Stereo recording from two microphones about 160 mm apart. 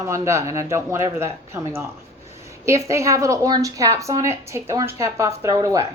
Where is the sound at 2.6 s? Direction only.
20° right (ahead or behind).